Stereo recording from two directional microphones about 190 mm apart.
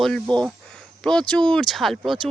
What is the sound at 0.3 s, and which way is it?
Speech, 5° left (ahead or behind).